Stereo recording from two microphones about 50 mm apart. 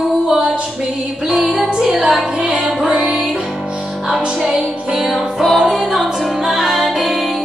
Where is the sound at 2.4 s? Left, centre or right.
Centre.